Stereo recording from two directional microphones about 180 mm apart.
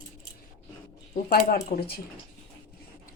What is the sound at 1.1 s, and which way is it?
Speech, 50° left (ahead or behind).